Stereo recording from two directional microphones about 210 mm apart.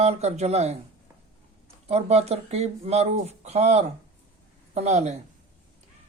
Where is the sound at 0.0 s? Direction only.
30° right (ahead or behind).